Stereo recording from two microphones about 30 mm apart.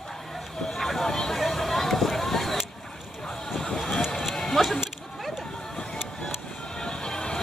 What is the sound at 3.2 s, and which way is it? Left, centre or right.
Vehicle, left.